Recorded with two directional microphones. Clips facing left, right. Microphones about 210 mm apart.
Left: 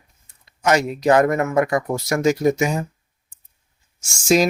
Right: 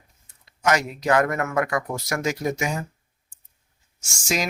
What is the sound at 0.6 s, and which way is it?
Speech, 25° left (ahead or behind).